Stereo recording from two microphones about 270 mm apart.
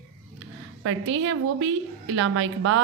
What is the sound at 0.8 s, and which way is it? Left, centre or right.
A woman's voice, right.